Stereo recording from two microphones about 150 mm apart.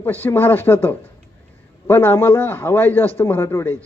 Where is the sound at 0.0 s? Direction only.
15° left (ahead or behind).